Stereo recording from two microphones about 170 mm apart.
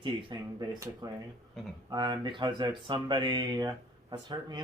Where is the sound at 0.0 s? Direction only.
30° right (ahead or behind).